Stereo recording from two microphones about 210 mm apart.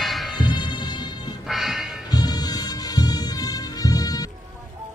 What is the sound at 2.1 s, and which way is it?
Music, 20° left (ahead or behind).